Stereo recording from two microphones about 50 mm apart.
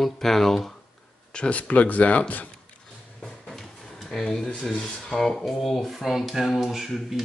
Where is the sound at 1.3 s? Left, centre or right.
Left.